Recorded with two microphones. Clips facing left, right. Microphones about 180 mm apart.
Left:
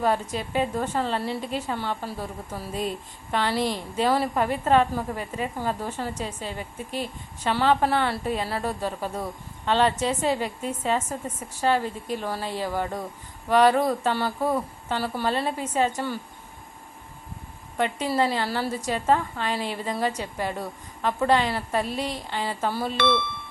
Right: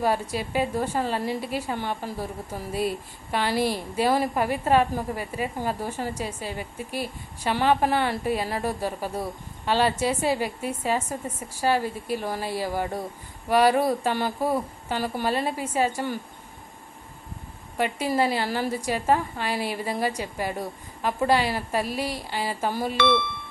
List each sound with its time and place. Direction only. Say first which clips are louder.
0.0 s a woman's voice: even; 10° right (ahead or behind)
17.7 s a woman's voice: even; 10° right (ahead or behind)
23.0 s speech: right 2 dB; 45° left (ahead or behind)